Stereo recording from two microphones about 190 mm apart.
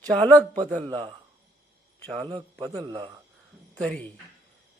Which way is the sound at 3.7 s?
5° left (ahead or behind).